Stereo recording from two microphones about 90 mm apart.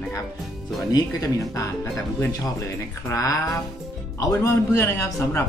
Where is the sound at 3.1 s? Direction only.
40° left (ahead or behind).